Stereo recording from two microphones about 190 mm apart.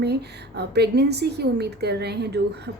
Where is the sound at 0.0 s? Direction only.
60° right (ahead or behind).